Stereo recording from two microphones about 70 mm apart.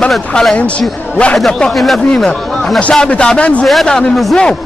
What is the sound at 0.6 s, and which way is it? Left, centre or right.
Speech, centre.